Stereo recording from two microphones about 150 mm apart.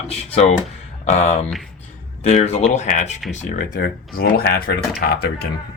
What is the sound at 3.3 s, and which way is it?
Speech, 60° left (ahead or behind).